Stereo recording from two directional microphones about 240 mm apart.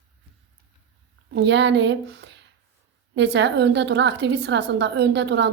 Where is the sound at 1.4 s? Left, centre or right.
Right.